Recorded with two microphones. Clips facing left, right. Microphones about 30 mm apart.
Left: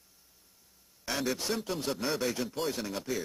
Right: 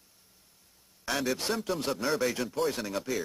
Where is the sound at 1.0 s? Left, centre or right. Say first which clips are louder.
Right 2 dB; centre.